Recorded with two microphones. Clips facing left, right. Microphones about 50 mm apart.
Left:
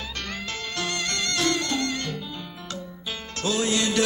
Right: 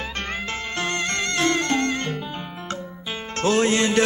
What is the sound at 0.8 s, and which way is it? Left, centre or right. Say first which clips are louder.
Music: right 4 dB; right.